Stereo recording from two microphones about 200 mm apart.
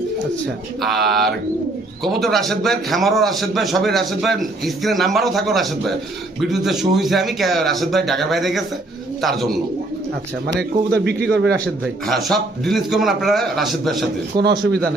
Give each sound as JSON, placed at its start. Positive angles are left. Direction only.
{"t": 0.8, "sound": "a man's voice", "side_deg": 0}
{"t": 10.4, "sound": "speech", "side_deg": -55}
{"t": 11.6, "sound": "a man's voice", "side_deg": 0}
{"t": 14.3, "sound": "speech", "side_deg": -20}